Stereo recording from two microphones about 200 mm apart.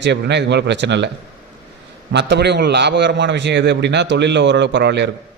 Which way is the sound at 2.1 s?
60° right (ahead or behind).